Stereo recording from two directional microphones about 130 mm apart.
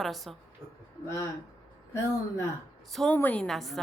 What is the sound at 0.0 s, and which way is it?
Speech, centre (ahead or behind).